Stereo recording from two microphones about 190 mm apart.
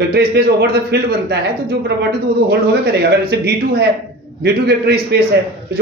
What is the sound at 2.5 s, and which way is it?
A man's voice, 60° right (ahead or behind).